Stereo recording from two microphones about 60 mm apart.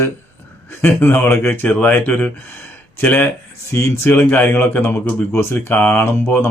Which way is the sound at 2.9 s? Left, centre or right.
Left.